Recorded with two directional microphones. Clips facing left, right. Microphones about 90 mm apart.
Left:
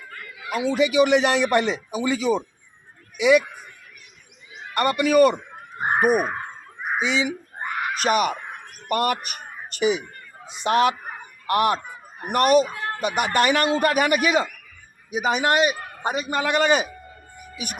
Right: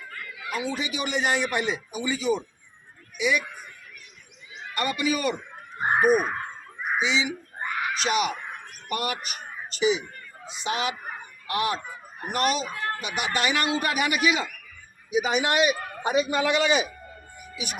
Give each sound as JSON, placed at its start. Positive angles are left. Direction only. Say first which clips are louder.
{"t": 0.1, "sound": "a sound", "louder": "left 1 dB", "side_deg": 15}
{"t": 0.5, "sound": "a man's voice", "louder": "left 10 dB", "side_deg": 80}
{"t": 4.7, "sound": "a man's voice", "louder": "left 7 dB", "side_deg": 60}
{"t": 5.8, "sound": "a sound", "louder": "left 1 dB", "side_deg": 5}
{"t": 7.0, "sound": "a man's voice", "louder": "left 3 dB", "side_deg": 50}
{"t": 12.6, "sound": "speech", "louder": "left 1 dB", "side_deg": 25}
{"t": 13.0, "sound": "a man's voice", "louder": "left 9 dB", "side_deg": 55}